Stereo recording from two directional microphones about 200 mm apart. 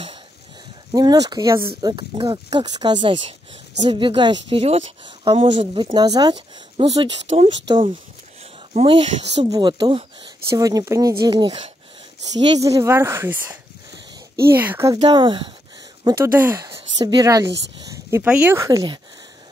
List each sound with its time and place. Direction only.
0.9 s a woman's voice: 20° right (ahead or behind)
8.7 s a woman's voice: 30° right (ahead or behind); by 15.0 s 10° right (ahead or behind)
15.0 s a woman's voice: 20° right (ahead or behind)